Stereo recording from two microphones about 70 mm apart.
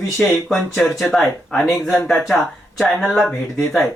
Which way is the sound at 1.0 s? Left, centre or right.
Centre.